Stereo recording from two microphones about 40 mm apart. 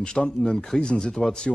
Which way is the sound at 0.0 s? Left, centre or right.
Centre.